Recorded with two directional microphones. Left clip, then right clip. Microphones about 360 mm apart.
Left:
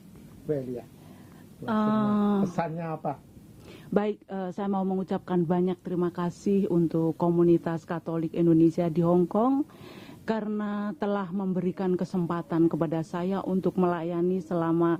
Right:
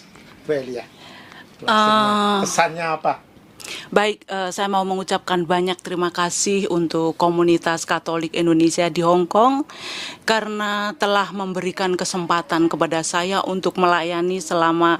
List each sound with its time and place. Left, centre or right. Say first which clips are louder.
0.4 s speech: right 8 dB; centre
6.9 s speech: right 7 dB; centre
7.3 s speech: right 6 dB; centre